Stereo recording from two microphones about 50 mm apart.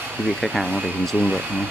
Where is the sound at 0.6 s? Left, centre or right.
Centre.